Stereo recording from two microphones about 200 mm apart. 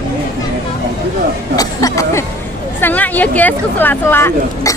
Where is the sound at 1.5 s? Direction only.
20° left (ahead or behind).